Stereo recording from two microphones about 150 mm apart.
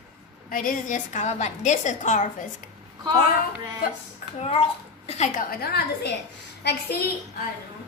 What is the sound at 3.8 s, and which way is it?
Speech, 80° left.